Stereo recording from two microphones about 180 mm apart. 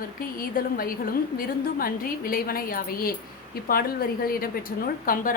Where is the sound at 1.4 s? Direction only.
55° left (ahead or behind).